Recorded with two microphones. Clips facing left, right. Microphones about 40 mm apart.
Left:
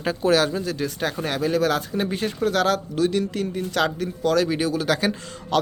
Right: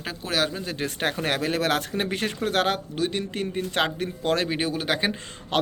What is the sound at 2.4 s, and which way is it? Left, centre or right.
Speech, right.